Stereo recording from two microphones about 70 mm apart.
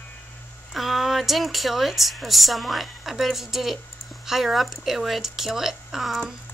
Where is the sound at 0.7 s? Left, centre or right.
Centre.